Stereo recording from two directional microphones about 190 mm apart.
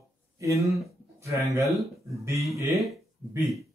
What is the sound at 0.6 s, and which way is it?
Speech, centre (ahead or behind).